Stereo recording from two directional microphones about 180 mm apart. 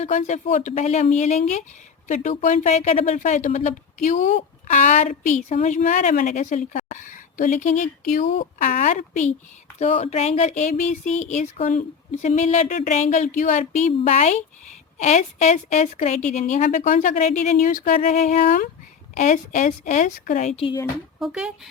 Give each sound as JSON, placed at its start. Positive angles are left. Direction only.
{"t": 0.0, "sound": "speech", "side_deg": 40}
{"t": 21.2, "sound": "speech", "side_deg": -5}